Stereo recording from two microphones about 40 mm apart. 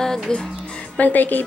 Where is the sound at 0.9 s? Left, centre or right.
Left.